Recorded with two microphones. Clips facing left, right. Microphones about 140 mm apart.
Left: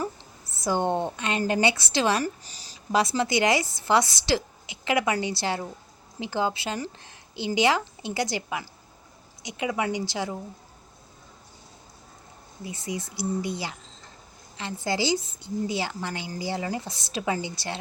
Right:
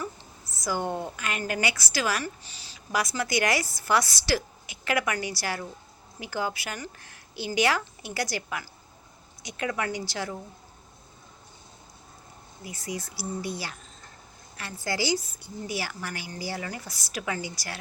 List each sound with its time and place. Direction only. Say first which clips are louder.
0.0 s a woman's voice: left 4 dB; 30° left (ahead or behind)
2.2 s speech: left 5 dB; 40° left (ahead or behind)
2.9 s a woman's voice: left 4 dB; 25° left (ahead or behind)
12.6 s a woman's voice: left 2 dB; 25° left (ahead or behind)